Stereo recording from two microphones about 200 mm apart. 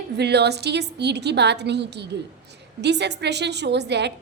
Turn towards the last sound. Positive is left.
turn(degrees=-60)  # may be behind; listen again after turning